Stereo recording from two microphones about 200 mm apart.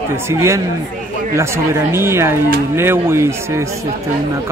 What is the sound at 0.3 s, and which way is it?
Speech, 15° right (ahead or behind).